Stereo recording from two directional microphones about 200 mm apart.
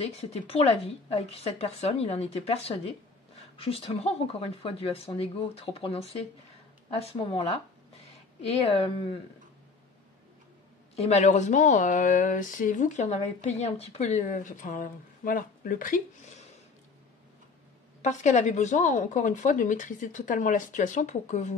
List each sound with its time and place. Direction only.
0.0 s speech: 30° left (ahead or behind)
11.0 s speech: 35° left (ahead or behind)
18.0 s speech: 35° left (ahead or behind)